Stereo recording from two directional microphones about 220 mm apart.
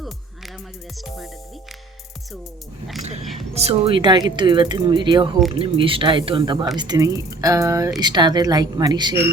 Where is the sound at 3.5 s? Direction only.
30° right (ahead or behind).